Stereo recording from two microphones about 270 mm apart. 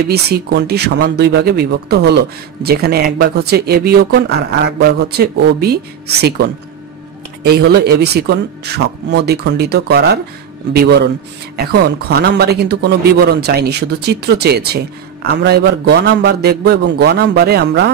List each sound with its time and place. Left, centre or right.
0.1 s speech: right
7.4 s speech: right